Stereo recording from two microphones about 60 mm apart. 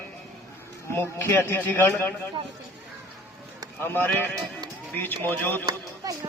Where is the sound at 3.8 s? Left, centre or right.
Left.